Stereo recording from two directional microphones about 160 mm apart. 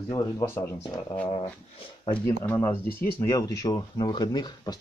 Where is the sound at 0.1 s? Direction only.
25° left (ahead or behind).